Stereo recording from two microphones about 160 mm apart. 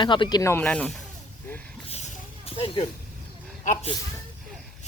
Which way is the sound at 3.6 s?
55° left (ahead or behind).